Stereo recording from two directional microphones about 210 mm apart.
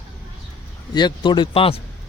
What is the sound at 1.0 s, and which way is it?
Speech, 20° left (ahead or behind).